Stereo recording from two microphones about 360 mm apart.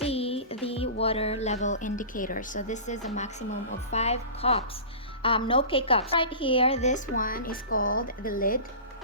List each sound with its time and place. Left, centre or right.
0.0 s music: centre
1.0 s a woman's voice: centre